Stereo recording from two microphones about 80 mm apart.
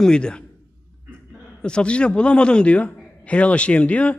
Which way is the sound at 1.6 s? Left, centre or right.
Centre.